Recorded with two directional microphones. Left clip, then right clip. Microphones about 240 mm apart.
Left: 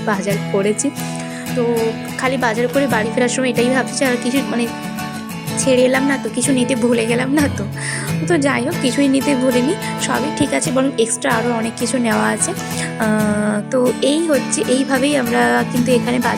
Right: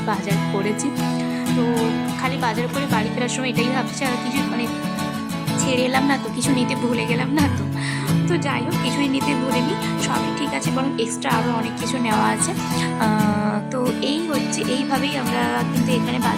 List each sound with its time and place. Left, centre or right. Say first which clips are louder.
0.1 s speech: left 5 dB; centre
2.2 s speech: left 8 dB; centre
5.6 s speech: left 6 dB; centre